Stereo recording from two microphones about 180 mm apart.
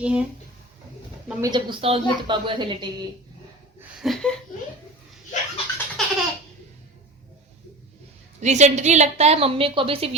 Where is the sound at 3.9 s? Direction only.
Centre (ahead or behind).